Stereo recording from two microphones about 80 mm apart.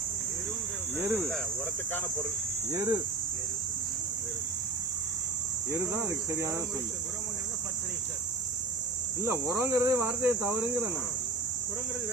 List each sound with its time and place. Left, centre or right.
0.9 s speech: right
2.7 s speech: right
5.7 s speech: right
9.2 s speech: right